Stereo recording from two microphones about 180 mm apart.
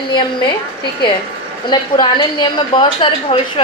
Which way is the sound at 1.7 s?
25° left (ahead or behind).